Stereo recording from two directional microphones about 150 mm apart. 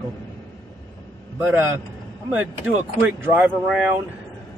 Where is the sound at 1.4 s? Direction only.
15° right (ahead or behind).